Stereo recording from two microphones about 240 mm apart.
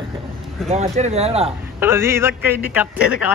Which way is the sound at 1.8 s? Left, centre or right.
Centre.